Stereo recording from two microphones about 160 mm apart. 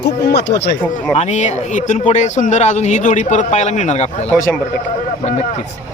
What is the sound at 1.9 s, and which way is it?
A man's voice, 50° left (ahead or behind).